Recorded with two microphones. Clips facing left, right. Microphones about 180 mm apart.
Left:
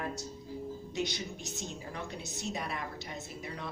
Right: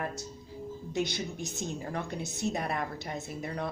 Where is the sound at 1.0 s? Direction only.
50° right (ahead or behind).